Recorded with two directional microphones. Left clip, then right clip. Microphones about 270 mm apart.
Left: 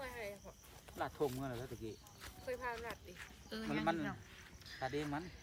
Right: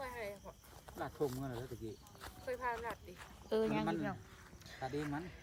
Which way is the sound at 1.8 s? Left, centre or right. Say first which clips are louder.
Right 1 dB; centre.